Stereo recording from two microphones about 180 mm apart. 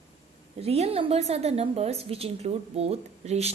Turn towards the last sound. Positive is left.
turn(degrees=-35)  # may be behind; listen again after turning